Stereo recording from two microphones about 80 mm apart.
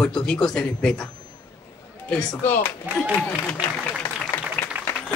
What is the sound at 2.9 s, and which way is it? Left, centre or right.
Speech, right.